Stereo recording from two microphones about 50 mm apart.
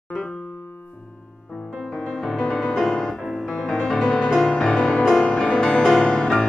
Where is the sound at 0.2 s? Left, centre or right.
Centre.